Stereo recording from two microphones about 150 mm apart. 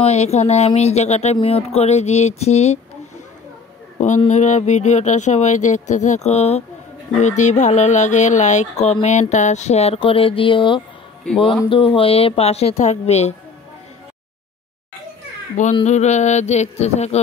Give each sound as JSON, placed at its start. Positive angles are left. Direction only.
{"t": 0.0, "sound": "speech", "side_deg": 45}
{"t": 4.3, "sound": "speech", "side_deg": 50}
{"t": 15.8, "sound": "speech", "side_deg": 50}